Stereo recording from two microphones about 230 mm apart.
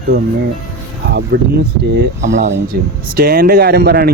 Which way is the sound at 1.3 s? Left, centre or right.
Right.